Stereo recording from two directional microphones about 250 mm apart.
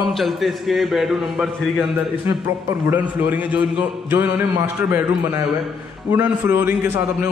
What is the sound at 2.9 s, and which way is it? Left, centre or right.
A man's voice, centre.